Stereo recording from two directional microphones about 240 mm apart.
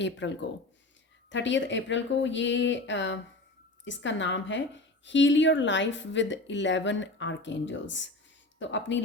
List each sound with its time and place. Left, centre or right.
0.0 s speech: left